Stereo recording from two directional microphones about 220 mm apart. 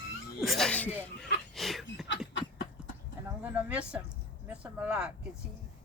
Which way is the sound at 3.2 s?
5° right (ahead or behind).